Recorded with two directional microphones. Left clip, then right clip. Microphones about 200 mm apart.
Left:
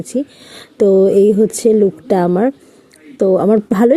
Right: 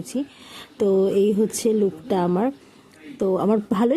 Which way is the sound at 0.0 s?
20° left (ahead or behind).